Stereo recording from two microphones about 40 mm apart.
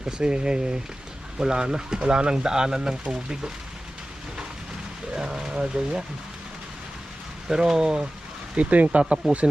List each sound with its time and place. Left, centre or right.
0.2 s speech: right
5.1 s a sound: centre
5.5 s speech: right
7.4 s speech: centre
8.5 s speech: right